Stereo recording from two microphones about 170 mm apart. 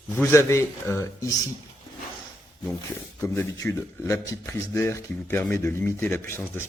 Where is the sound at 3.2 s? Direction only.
15° left (ahead or behind).